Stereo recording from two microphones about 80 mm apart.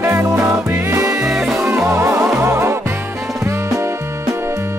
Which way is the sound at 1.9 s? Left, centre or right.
Right.